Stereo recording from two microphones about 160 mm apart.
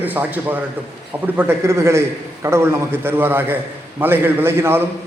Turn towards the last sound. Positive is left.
turn(degrees=-15)  # may be behind; listen again after turning